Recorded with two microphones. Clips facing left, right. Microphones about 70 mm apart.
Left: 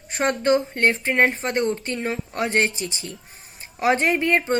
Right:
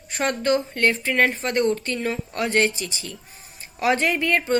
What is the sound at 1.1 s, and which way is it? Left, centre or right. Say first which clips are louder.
A woman's voice: left 1 dB; left.